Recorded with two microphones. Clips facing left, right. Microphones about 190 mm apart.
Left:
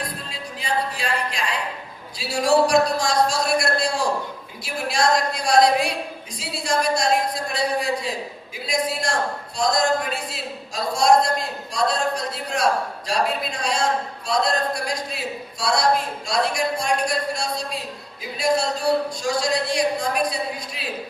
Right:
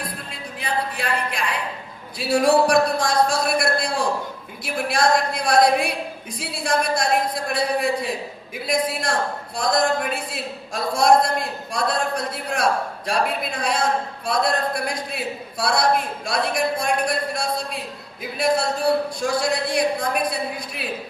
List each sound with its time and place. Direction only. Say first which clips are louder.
0.3 s music: left 1 dB; 55° right (ahead or behind)
2.1 s a man's voice: right 2 dB; 55° right (ahead or behind)